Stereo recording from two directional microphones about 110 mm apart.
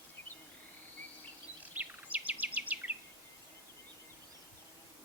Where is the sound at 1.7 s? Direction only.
15° right (ahead or behind).